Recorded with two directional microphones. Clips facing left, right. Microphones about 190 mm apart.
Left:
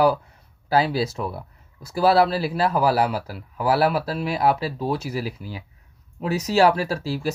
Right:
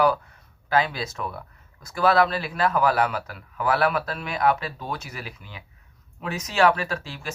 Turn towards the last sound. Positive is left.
turn(degrees=35)  # may be behind; listen again after turning